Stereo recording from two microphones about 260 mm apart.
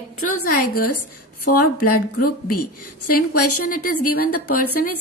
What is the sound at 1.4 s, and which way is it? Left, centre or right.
A woman's voice, left.